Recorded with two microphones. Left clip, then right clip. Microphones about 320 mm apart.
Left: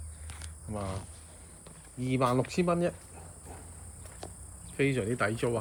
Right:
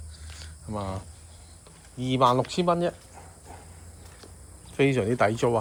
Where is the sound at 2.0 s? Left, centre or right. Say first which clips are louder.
Right 7 dB; centre.